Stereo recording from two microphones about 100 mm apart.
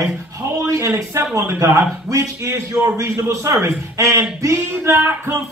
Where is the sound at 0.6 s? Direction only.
30° right (ahead or behind).